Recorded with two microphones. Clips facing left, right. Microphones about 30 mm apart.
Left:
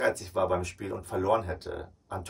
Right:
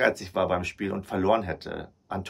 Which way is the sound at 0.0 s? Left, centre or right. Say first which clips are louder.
Right 3 dB; right.